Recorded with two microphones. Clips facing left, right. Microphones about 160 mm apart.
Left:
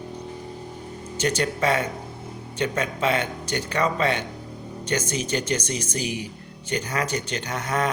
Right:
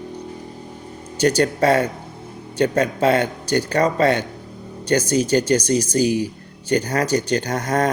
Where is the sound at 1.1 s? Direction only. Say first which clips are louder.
Right 7 dB; 40° right (ahead or behind).